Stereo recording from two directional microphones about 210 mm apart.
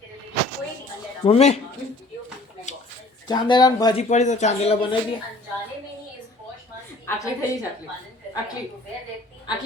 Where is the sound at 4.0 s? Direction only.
35° left (ahead or behind).